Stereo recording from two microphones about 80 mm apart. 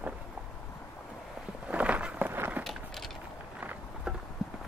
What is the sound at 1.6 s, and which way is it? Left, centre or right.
Walk, centre.